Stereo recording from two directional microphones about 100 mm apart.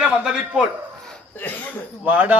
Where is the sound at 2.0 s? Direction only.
15° right (ahead or behind).